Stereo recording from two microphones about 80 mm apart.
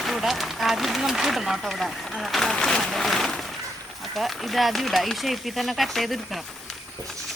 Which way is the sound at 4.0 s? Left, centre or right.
Centre.